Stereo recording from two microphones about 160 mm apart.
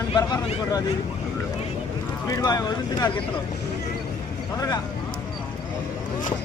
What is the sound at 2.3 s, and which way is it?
Speech, 20° left (ahead or behind).